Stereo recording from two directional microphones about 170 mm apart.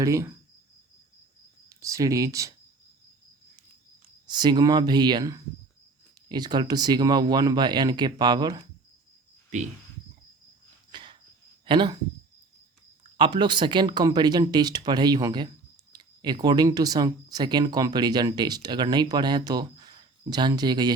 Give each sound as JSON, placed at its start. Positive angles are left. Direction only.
{"t": 0.0, "sound": "speech", "side_deg": -20}
{"t": 1.7, "sound": "speech", "side_deg": -20}
{"t": 4.3, "sound": "speech", "side_deg": -25}
{"t": 10.9, "sound": "a sound", "side_deg": -30}
{"t": 11.6, "sound": "speech", "side_deg": -30}
{"t": 13.1, "sound": "speech", "side_deg": -30}